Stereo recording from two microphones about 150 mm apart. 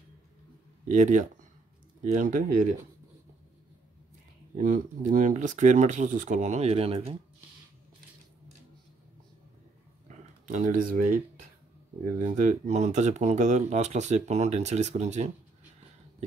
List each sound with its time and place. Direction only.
0.8 s speech: 55° right (ahead or behind)
4.6 s speech: 60° right (ahead or behind); by 7.2 s 40° right (ahead or behind)
10.0 s a sound: 55° right (ahead or behind)
12.2 s speech: 55° right (ahead or behind)